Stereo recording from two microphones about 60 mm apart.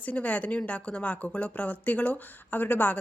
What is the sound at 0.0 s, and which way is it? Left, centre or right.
A woman's voice, left.